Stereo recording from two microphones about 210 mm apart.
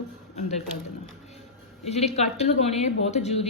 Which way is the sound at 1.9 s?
30° left (ahead or behind).